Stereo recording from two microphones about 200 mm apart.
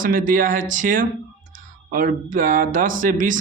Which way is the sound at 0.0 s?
45° right (ahead or behind).